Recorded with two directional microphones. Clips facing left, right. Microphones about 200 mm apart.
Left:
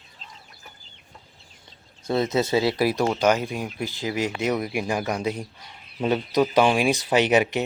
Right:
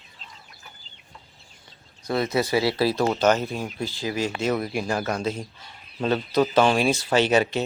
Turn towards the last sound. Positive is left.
turn(degrees=20)  # may be behind; listen again after turning